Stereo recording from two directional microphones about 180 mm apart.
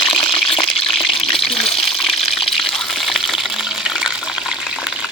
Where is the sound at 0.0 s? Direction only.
30° left (ahead or behind).